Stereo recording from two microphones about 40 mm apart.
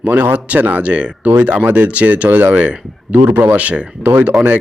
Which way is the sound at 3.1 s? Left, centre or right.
Right.